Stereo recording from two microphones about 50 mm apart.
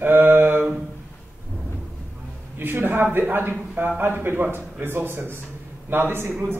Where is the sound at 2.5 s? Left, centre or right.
Right.